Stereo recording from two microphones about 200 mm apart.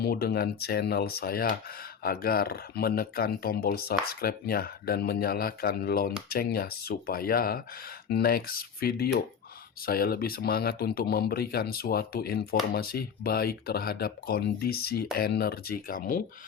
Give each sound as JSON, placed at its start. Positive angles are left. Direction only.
{"t": 0.0, "sound": "speech", "side_deg": 50}